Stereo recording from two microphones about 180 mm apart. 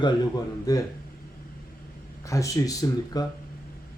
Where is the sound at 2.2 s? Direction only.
15° left (ahead or behind).